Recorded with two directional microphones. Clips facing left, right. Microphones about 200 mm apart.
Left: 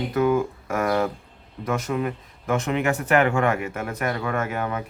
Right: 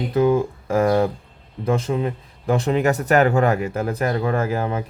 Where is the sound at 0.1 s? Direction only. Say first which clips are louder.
Right 4 dB; 30° right (ahead or behind).